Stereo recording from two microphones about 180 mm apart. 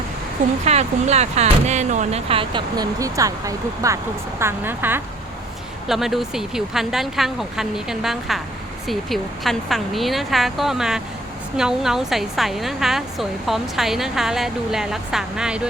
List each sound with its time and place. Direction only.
0.6 s a woman's voice: 40° right (ahead or behind); by 15.6 s 5° right (ahead or behind)